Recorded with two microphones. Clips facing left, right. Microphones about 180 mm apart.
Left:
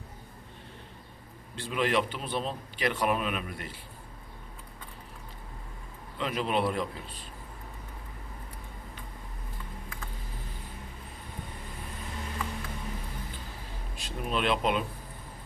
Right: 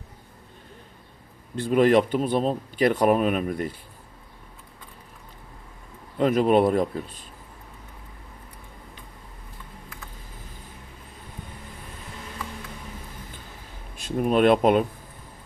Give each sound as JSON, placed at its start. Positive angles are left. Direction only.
{"t": 1.5, "sound": "a man's voice", "side_deg": -45}
{"t": 6.1, "sound": "a man's voice", "side_deg": -45}
{"t": 13.9, "sound": "speech", "side_deg": -50}